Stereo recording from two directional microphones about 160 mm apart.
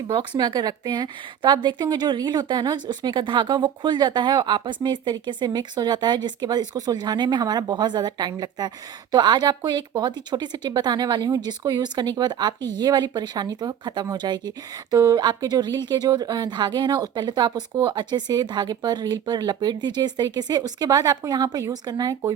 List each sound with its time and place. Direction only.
0.1 s a woman's voice: 30° right (ahead or behind)